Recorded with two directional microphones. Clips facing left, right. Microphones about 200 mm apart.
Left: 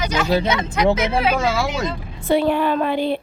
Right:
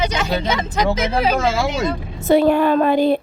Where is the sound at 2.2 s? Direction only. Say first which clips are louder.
Right 4 dB; 45° right (ahead or behind).